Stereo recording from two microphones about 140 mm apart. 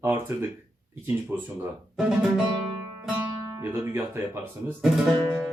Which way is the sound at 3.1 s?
15° right (ahead or behind).